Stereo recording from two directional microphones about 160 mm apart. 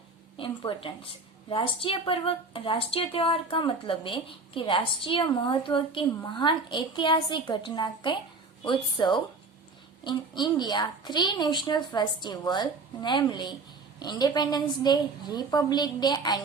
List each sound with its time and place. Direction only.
0.3 s a woman's voice: 30° left (ahead or behind)